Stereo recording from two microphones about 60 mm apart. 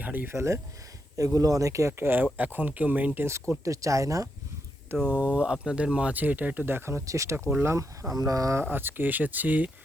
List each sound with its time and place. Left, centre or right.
0.0 s a sound: right
0.3 s speech: right
1.1 s speech: right
1.9 s speech: right
3.2 s speech: right
3.6 s speech: right
4.9 s speech: right
6.7 s speech: right
7.0 s speech: right
8.1 s speech: right
8.6 s speech: right